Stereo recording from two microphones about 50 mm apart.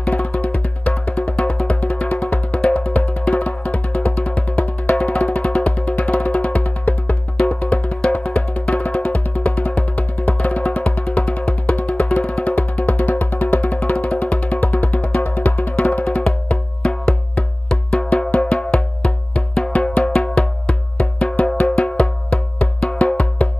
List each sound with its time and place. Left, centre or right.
0.0 s music: left
17.6 s music: centre